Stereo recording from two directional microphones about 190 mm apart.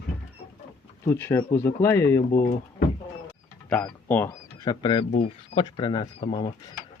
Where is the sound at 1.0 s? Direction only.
15° left (ahead or behind).